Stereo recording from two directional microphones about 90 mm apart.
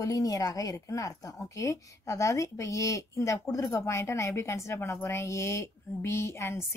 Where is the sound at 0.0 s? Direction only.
40° left (ahead or behind).